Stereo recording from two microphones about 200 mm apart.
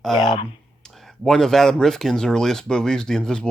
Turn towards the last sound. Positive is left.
turn(degrees=5)  # may be behind; listen again after turning